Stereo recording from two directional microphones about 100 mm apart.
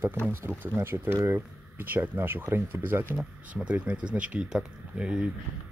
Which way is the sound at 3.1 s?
10° right (ahead or behind).